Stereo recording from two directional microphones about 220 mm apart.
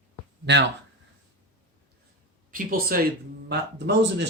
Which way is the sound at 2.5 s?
40° right (ahead or behind).